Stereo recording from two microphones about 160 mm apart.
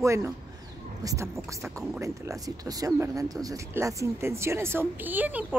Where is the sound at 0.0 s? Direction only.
20° right (ahead or behind).